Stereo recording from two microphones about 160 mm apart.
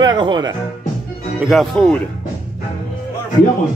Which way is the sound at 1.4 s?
Centre (ahead or behind).